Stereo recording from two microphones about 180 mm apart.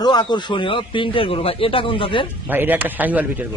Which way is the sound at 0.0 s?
25° left (ahead or behind).